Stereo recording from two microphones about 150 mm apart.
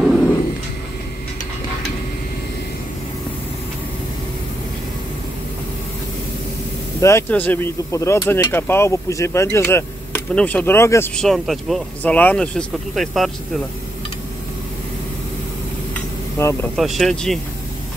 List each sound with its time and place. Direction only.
0.0 s a sound: centre (ahead or behind)
7.0 s speech: 20° left (ahead or behind)
11.1 s speech: centre (ahead or behind)
12.0 s speech: 10° left (ahead or behind)
16.4 s speech: 15° left (ahead or behind)
16.7 s speech: centre (ahead or behind)